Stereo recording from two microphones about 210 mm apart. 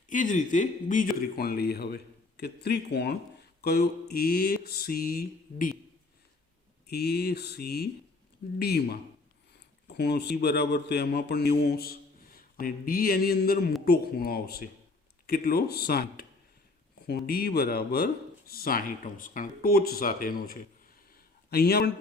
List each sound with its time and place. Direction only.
0.1 s a man's voice: 40° left (ahead or behind)
6.9 s a man's voice: 50° left (ahead or behind)
21.1 s a sound: 45° left (ahead or behind)